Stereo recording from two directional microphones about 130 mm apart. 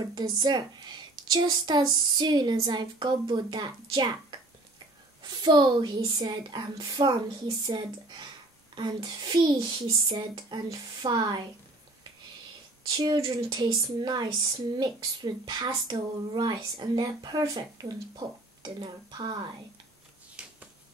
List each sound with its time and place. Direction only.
0.0 s a woman's voice: 30° right (ahead or behind)
12.9 s a woman's voice: 35° right (ahead or behind)
15.4 s a woman's voice: 35° right (ahead or behind)
20.4 s finger snapping: 5° right (ahead or behind)